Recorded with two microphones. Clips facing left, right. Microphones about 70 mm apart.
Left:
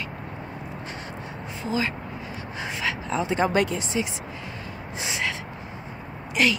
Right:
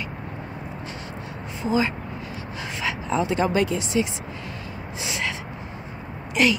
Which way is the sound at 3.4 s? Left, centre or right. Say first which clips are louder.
Right 1 dB; left.